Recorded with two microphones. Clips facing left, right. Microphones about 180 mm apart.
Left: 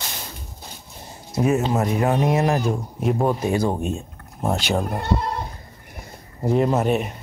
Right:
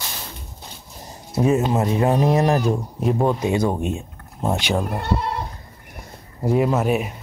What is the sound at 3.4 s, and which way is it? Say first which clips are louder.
Speech: right 1 dB; 20° right (ahead or behind).